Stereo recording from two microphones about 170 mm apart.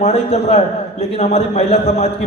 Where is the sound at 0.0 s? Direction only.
35° left (ahead or behind).